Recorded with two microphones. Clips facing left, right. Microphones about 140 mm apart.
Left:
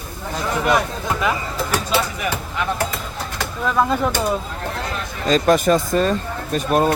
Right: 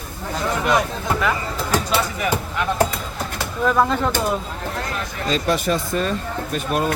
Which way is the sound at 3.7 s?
Centre (ahead or behind).